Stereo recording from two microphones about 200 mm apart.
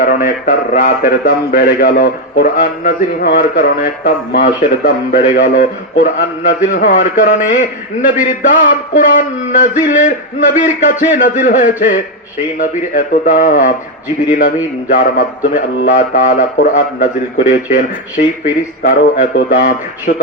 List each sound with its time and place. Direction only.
0.0 s a man's voice: 45° left (ahead or behind)